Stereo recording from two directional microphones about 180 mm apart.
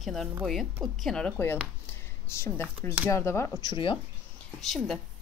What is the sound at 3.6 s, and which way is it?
Speech, 25° left (ahead or behind).